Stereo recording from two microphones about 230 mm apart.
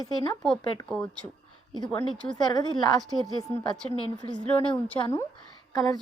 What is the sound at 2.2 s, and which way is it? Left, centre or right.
Speech, centre.